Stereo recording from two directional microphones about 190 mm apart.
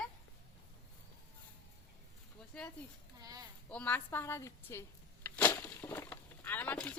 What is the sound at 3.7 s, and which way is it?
Speech, 5° left (ahead or behind).